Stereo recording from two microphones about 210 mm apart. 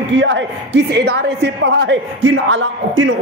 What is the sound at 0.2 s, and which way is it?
A man's voice, 60° right (ahead or behind).